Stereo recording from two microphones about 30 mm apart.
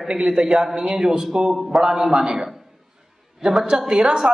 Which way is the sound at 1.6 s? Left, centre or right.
Centre.